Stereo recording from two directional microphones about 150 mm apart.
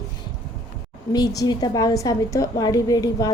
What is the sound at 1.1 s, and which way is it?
A woman's voice, 25° left (ahead or behind).